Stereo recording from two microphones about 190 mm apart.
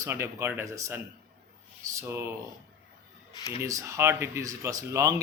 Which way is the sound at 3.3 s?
20° left (ahead or behind).